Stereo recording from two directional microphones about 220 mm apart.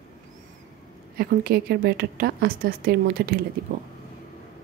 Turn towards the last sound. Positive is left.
turn(degrees=-40)  # may be behind; listen again after turning